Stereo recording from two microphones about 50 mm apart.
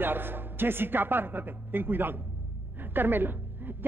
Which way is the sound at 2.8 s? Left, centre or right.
Right.